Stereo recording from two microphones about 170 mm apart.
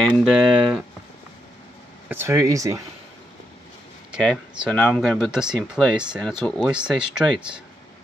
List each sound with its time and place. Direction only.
0.2 s speech: 5° right (ahead or behind)
2.0 s speech: 15° right (ahead or behind)
4.1 s speech: 5° right (ahead or behind)